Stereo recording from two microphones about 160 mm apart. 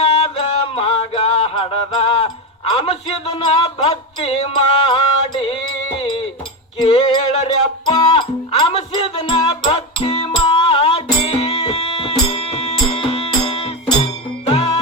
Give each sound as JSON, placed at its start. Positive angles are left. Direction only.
{"t": 0.0, "sound": "music", "side_deg": 40}
{"t": 7.9, "sound": "music", "side_deg": 25}